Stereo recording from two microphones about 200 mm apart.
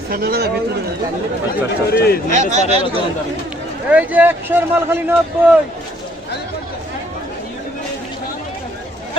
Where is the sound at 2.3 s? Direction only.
35° right (ahead or behind).